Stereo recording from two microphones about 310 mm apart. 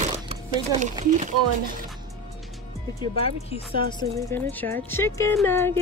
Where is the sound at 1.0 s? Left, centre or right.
Right.